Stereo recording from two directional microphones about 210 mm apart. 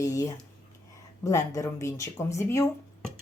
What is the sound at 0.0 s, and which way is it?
Speech, 15° left (ahead or behind).